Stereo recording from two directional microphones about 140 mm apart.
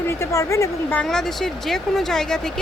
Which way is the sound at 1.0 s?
5° left (ahead or behind).